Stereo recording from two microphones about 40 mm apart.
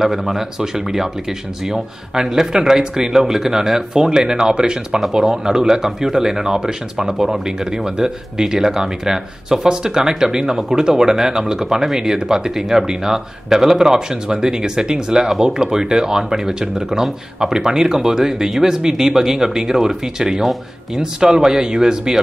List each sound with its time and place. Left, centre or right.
0.0 s speech: centre